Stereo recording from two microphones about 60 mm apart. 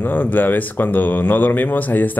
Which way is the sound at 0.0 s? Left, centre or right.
Left.